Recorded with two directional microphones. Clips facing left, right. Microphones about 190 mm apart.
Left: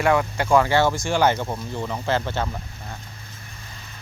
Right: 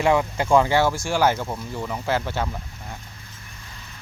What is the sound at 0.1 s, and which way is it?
Speech, 15° right (ahead or behind).